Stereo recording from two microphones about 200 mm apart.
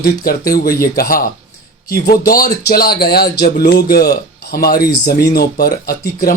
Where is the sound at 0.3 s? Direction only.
50° left (ahead or behind).